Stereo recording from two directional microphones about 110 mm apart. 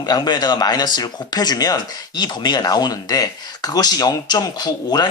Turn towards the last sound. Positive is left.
turn(degrees=35)  # may be behind; listen again after turning